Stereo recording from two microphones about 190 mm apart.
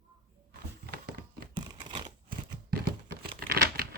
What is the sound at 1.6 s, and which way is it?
Crumpling, 25° right (ahead or behind).